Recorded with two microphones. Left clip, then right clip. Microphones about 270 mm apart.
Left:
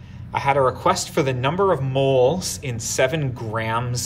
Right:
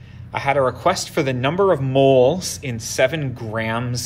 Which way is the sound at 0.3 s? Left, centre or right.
Centre.